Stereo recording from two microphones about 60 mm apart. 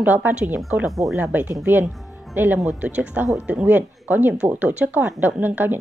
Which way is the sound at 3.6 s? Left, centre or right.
Right.